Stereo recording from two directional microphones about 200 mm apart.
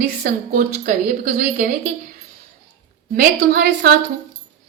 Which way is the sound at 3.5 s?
45° right (ahead or behind).